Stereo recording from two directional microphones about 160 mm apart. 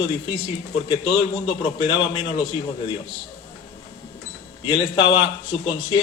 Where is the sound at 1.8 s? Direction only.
30° left (ahead or behind).